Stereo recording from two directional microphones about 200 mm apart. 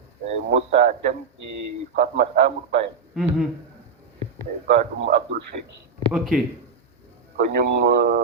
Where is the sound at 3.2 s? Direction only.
Centre (ahead or behind).